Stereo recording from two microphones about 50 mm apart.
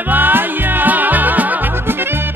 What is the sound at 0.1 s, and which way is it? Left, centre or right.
Music, right.